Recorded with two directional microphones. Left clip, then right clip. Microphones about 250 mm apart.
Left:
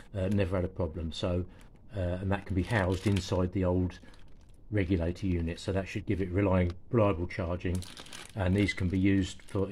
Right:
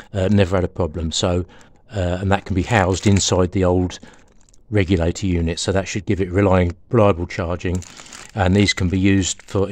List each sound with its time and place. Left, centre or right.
0.1 s speech: right